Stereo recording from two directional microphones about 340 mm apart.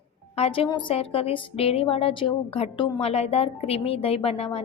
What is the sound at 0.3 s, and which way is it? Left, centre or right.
A woman's voice, centre.